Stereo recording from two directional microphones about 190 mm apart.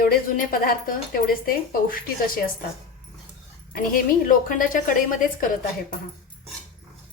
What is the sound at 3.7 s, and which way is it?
A woman's voice, 45° left (ahead or behind).